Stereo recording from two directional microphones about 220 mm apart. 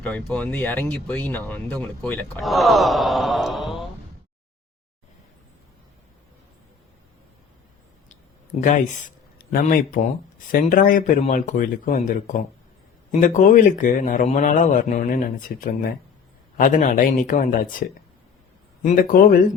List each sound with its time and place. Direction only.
0.0 s speech: 5° left (ahead or behind)
8.5 s speech: 30° left (ahead or behind)
9.4 s a man's voice: 40° left (ahead or behind)